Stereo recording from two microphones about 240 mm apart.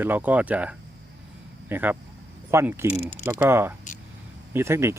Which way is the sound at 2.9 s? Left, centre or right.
Left.